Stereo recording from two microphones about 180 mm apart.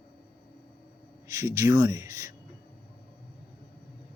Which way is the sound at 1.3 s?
15° right (ahead or behind).